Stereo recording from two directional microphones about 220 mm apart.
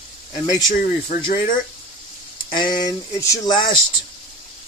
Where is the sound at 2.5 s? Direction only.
20° left (ahead or behind).